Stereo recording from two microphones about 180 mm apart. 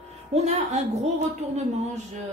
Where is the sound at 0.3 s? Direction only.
35° right (ahead or behind).